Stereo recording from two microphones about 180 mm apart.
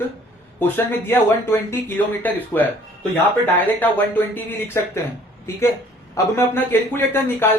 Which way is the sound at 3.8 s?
10° left (ahead or behind).